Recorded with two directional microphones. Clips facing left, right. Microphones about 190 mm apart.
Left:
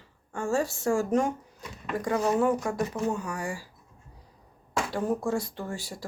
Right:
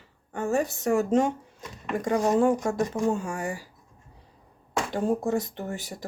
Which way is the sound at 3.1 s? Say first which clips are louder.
Right 3 dB; 25° right (ahead or behind).